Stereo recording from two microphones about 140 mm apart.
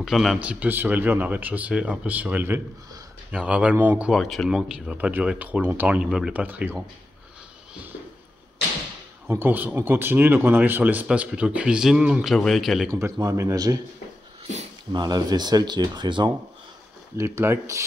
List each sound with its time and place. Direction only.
0.0 s speech: centre (ahead or behind)
4.1 s speech: centre (ahead or behind)
9.3 s speech: 15° right (ahead or behind)
12.9 s speech: 20° right (ahead or behind)
14.9 s speech: 30° right (ahead or behind)
17.2 s speech: 20° right (ahead or behind)